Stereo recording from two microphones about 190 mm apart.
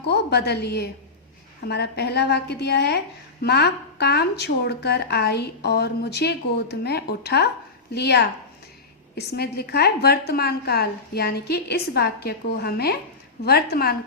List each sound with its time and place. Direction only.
0.0 s speech: 60° left (ahead or behind)